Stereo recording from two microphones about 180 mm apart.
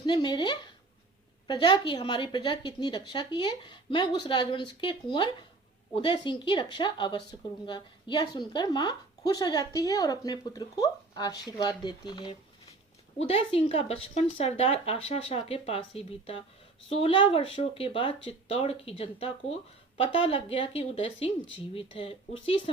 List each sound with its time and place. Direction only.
0.0 s a woman's voice: 25° left (ahead or behind)